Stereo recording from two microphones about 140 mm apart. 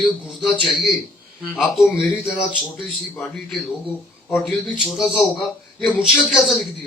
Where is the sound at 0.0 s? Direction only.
Centre (ahead or behind).